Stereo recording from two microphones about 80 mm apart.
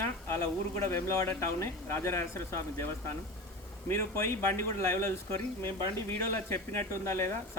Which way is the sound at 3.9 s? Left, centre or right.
Left.